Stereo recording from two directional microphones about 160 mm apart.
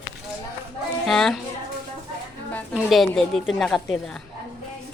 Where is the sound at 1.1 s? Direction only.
Centre (ahead or behind).